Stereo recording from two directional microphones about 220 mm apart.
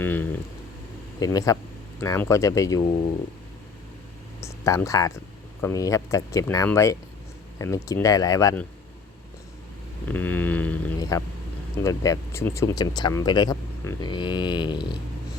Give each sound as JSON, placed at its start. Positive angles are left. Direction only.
{"t": 0.0, "sound": "speech", "side_deg": 10}
{"t": 4.4, "sound": "speech", "side_deg": 15}
{"t": 10.1, "sound": "a sound", "side_deg": 10}
{"t": 11.8, "sound": "speech", "side_deg": 15}